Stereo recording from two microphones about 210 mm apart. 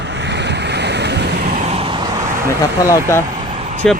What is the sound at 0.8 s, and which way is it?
Waves, 55° right (ahead or behind).